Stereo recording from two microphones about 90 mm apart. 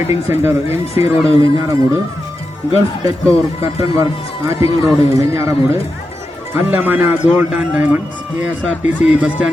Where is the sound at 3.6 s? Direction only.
90° left.